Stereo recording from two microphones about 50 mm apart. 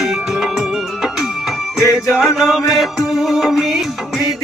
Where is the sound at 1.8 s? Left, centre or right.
Left.